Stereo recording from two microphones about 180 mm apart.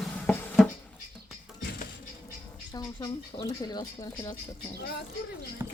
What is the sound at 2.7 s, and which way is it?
Speech, 20° left (ahead or behind).